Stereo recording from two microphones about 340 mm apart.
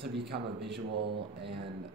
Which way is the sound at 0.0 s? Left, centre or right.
Right.